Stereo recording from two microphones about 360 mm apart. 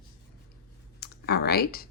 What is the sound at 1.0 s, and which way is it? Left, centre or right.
Speech, left.